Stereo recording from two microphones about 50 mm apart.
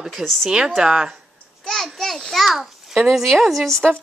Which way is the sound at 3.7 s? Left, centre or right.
Centre.